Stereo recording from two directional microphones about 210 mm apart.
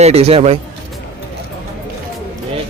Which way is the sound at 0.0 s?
30° right (ahead or behind).